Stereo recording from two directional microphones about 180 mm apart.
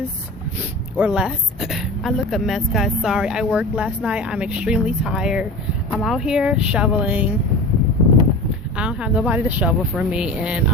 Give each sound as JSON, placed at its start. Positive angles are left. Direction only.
{"t": 0.9, "sound": "a woman's voice", "side_deg": -5}
{"t": 8.7, "sound": "speech", "side_deg": -5}